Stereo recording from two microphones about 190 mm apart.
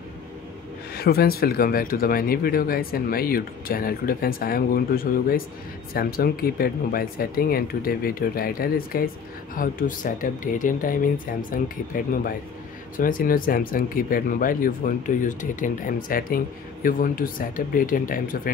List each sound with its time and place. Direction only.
0.9 s speech: 55° left (ahead or behind)